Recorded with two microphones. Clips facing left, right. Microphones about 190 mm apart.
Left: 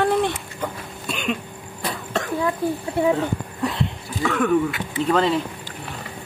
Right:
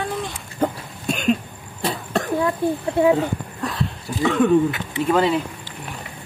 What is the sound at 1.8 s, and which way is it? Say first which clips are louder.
Cough: right 3 dB; 30° right (ahead or behind).